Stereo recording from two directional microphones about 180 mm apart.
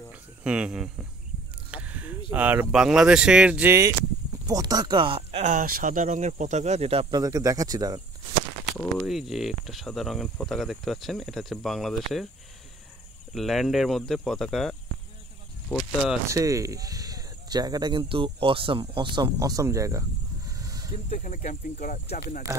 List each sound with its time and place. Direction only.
0.1 s cricket: 5° right (ahead or behind)
1.7 s a sound: 10° right (ahead or behind)
2.3 s speech: 10° right (ahead or behind); by 7.2 s 35° right (ahead or behind)
7.2 s speech: 20° right (ahead or behind)
8.7 s speech: centre (ahead or behind)
13.3 s speech: centre (ahead or behind)
16.3 s speech: 20° right (ahead or behind)
20.5 s vehicle: 20° right (ahead or behind)
21.1 s speech: 45° left (ahead or behind)